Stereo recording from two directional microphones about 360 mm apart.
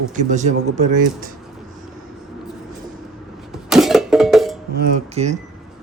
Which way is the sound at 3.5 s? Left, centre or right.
Centre.